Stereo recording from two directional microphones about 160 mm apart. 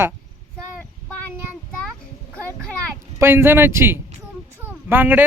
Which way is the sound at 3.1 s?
15° right (ahead or behind).